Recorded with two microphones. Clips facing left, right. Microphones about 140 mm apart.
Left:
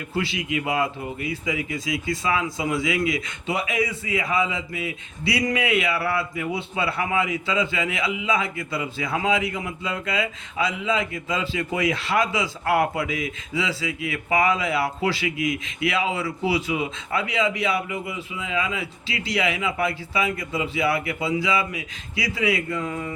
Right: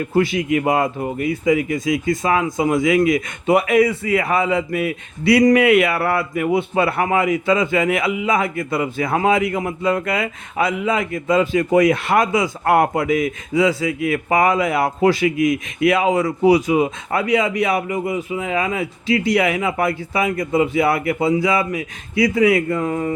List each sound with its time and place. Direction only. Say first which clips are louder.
0.1 s a man's voice: right 8 dB; 45° right (ahead or behind)